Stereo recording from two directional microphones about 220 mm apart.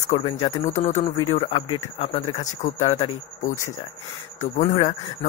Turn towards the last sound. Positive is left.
turn(degrees=35)  # may be behind; listen again after turning